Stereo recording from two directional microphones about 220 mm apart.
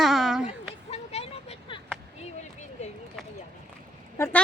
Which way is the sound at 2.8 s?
30° left (ahead or behind).